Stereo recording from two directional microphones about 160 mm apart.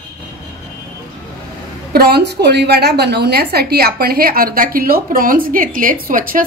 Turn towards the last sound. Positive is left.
turn(degrees=-60)  # may be behind; listen again after turning